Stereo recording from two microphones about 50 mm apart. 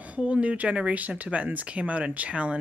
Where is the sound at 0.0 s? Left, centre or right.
Right.